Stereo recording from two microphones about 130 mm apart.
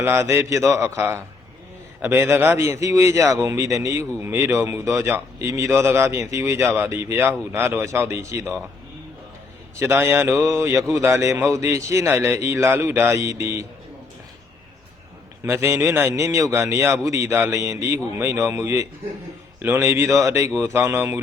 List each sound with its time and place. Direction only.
0.0 s a man's voice: 20° right (ahead or behind)
9.7 s a man's voice: 20° right (ahead or behind)
15.4 s a man's voice: 20° right (ahead or behind)